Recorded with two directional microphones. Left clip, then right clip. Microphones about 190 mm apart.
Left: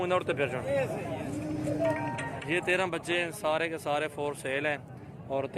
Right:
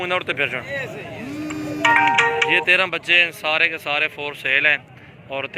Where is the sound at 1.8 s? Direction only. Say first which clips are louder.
Right 18 dB; 50° right (ahead or behind).